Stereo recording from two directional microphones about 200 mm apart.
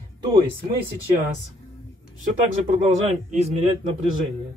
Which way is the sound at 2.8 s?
35° right (ahead or behind).